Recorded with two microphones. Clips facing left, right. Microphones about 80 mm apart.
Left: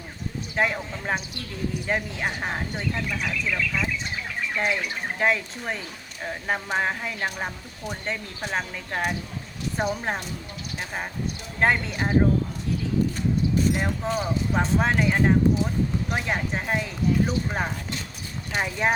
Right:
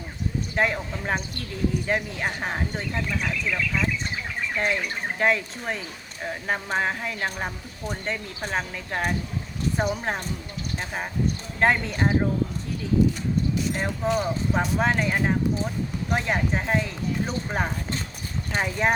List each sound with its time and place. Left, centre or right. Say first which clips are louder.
0.5 s speech: even; centre
13.7 s speech: right 1 dB; centre